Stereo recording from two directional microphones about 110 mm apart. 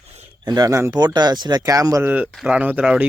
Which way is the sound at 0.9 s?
40° right (ahead or behind).